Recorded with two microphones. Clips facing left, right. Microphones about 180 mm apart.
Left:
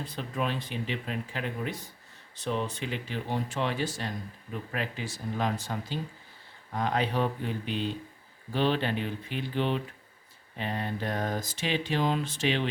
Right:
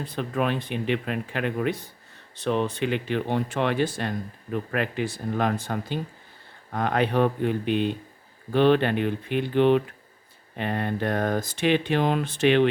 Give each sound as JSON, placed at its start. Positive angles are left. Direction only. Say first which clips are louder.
{"t": 0.0, "sound": "speech", "louder": "right 6 dB", "side_deg": -60}